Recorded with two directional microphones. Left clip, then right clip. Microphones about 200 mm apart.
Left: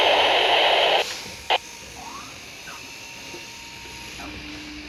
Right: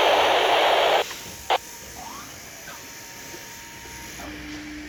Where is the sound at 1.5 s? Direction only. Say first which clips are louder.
Left 1 dB; 15° right (ahead or behind).